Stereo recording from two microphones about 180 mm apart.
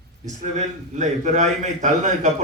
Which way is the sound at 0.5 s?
40° right (ahead or behind).